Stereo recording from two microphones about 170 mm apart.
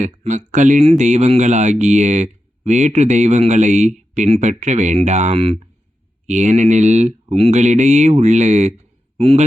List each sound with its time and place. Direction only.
0.0 s a man's voice: 45° right (ahead or behind)